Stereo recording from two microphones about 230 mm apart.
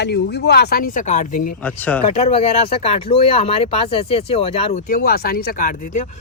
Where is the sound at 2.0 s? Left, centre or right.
Left.